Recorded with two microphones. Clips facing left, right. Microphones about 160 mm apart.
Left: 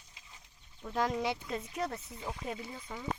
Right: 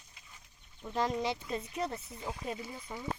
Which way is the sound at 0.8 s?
5° right (ahead or behind).